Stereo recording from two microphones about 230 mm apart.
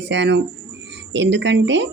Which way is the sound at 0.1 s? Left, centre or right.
Right.